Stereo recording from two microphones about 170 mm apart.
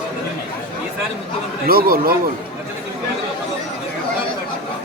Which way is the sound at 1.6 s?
60° right (ahead or behind).